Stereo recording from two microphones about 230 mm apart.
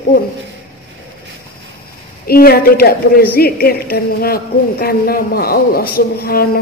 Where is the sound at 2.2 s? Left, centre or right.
Left.